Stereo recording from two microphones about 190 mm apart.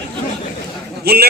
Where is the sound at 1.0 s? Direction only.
55° right (ahead or behind).